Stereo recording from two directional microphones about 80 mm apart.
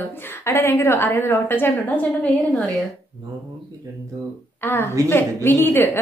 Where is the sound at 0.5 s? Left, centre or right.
Left.